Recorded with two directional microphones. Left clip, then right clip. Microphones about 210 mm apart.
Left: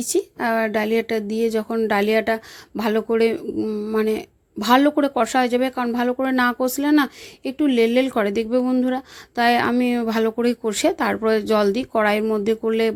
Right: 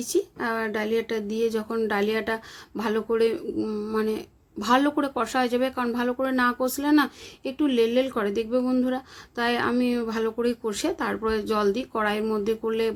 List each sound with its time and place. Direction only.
0.0 s speech: 35° left (ahead or behind)